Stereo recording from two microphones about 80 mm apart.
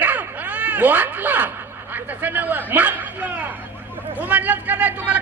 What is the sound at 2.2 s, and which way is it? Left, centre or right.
A man's voice, right.